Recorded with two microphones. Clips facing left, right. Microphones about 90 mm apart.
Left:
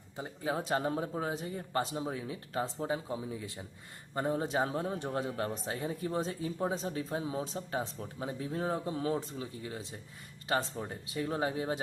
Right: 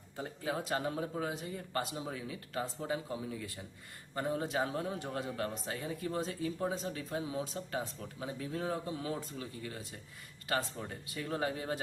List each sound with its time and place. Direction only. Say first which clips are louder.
0.4 s speech: left 3 dB; 30° left (ahead or behind)